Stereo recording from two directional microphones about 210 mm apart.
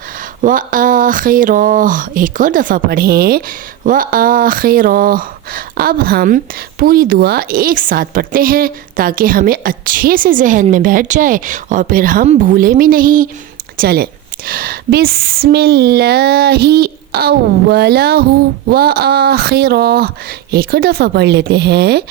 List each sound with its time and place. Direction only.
0.4 s a woman's voice: 40° right (ahead or behind)